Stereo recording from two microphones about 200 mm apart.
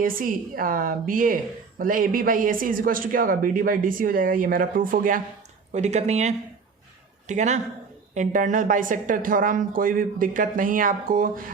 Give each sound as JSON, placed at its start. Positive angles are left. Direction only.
{"t": 0.0, "sound": "speech", "side_deg": -45}